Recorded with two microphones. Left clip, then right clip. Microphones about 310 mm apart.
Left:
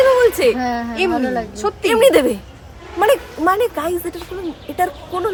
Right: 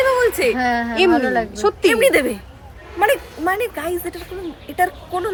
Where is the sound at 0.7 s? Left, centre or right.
Right.